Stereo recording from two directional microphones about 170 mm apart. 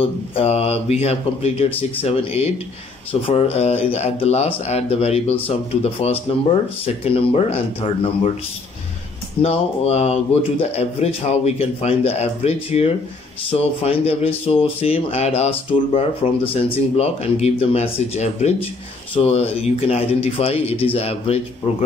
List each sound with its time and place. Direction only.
0.0 s speech: 35° left (ahead or behind)
9.4 s speech: 35° left (ahead or behind)